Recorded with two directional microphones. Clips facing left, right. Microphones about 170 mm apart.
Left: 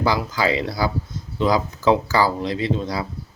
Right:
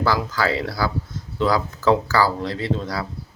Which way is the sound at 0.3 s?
15° left (ahead or behind).